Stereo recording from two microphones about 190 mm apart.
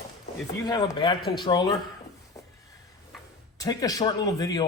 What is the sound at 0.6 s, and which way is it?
A man's voice, 20° left (ahead or behind).